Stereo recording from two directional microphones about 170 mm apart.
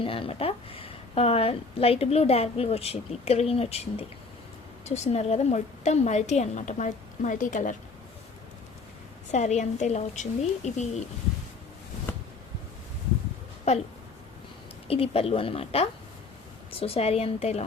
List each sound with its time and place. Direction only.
0.0 s a woman's voice: 30° left (ahead or behind); by 7.8 s 50° left (ahead or behind)
9.3 s a woman's voice: 45° left (ahead or behind)
14.8 s a woman's voice: 35° left (ahead or behind)